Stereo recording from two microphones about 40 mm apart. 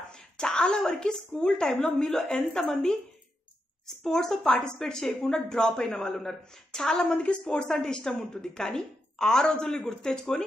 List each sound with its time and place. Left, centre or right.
0.1 s a woman's voice: centre